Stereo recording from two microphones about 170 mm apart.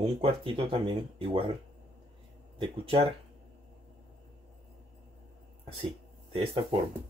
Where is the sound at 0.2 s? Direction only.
30° right (ahead or behind).